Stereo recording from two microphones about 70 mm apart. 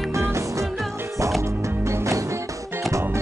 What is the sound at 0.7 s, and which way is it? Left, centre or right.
Music, centre.